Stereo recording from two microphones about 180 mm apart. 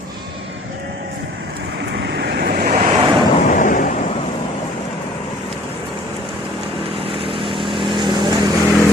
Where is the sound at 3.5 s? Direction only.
45° left (ahead or behind).